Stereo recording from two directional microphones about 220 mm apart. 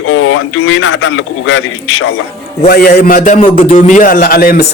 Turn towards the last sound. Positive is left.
turn(degrees=40)  # may be behind; listen again after turning